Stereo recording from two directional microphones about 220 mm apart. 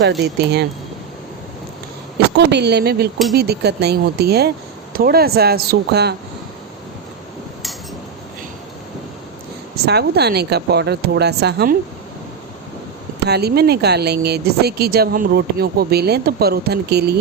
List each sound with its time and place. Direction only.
0.2 s speech: 50° right (ahead or behind)
2.5 s speech: 50° right (ahead or behind)
9.8 s speech: 45° right (ahead or behind)
13.2 s speech: 45° right (ahead or behind)